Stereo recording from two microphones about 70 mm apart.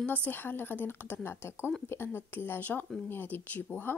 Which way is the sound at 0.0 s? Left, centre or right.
Left.